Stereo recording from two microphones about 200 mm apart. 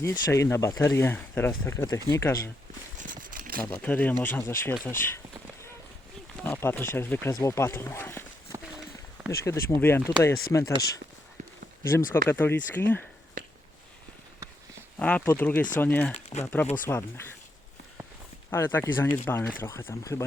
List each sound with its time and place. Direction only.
0.0 s speech: 15° left (ahead or behind)
3.0 s a sound: 40° right (ahead or behind)
3.8 s speech: 5° left (ahead or behind)
6.4 s speech: 10° left (ahead or behind)
9.4 s speech: 15° left (ahead or behind)
14.9 s speech: 5° left (ahead or behind)
16.6 s speech: 40° left (ahead or behind)
18.5 s speech: 10° left (ahead or behind)